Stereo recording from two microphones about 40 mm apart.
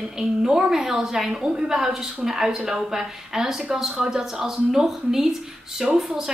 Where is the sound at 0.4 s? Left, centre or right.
Centre.